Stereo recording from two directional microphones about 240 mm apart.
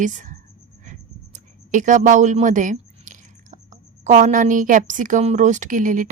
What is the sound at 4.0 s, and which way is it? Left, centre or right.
A woman's voice, right.